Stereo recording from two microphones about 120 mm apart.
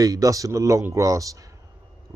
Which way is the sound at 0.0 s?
30° right (ahead or behind).